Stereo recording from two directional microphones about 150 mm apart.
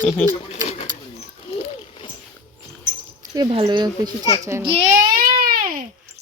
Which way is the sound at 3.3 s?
35° right (ahead or behind).